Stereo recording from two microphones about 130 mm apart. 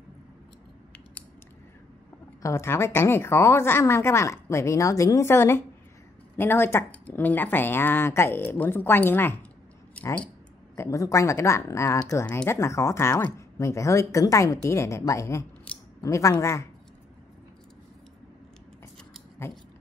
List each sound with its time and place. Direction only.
2.4 s a woman's voice: 20° left (ahead or behind)
10.8 s a woman's voice: 25° left (ahead or behind)